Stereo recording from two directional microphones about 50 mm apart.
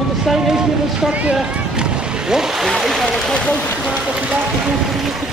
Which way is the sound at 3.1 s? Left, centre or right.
Centre.